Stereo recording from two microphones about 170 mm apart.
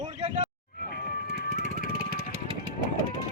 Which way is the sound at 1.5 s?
45° right (ahead or behind).